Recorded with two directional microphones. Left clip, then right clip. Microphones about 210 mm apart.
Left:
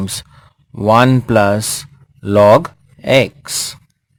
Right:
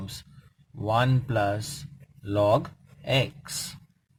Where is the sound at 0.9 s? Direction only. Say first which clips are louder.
Left 15 dB; 40° left (ahead or behind).